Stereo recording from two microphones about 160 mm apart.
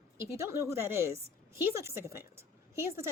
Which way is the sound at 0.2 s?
15° right (ahead or behind).